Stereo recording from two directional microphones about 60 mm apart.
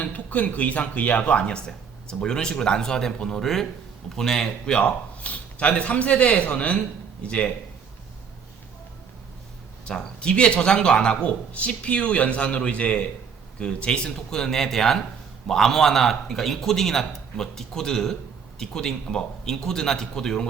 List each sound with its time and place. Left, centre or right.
0.0 s a man's voice: left
9.8 s a man's voice: centre